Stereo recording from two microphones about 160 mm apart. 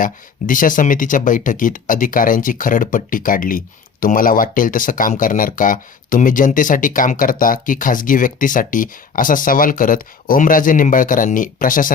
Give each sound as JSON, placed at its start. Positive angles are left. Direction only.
{"t": 0.0, "sound": "speech", "side_deg": 55}